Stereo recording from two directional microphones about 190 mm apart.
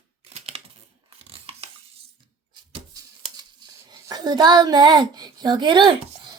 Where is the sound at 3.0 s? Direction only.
20° right (ahead or behind).